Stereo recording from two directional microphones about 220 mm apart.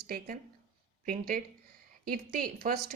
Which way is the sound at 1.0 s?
40° right (ahead or behind).